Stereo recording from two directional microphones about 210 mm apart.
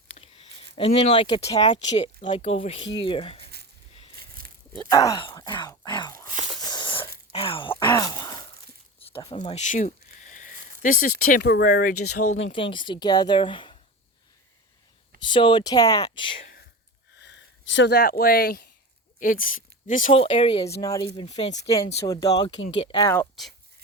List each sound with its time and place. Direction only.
0.8 s speech: 30° left (ahead or behind)
4.9 s speech: 15° left (ahead or behind)
6.2 s a sound: 35° right (ahead or behind)
6.6 s a sound: 20° left (ahead or behind)
7.3 s speech: 25° left (ahead or behind)
7.8 s groan: 20° left (ahead or behind)
9.0 s a sound: 25° left (ahead or behind)
11.3 s speech: 45° left (ahead or behind)
12.0 s speech: 90° left
12.5 s speech: 25° left (ahead or behind)
15.2 s speech: 20° left (ahead or behind)
17.2 s speech: 55° left (ahead or behind); by 21.5 s 30° left (ahead or behind)
22.0 s speech: 15° left (ahead or behind)
23.1 s speech: centre (ahead or behind)